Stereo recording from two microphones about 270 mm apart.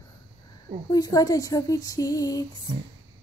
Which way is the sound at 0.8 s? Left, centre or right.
Centre.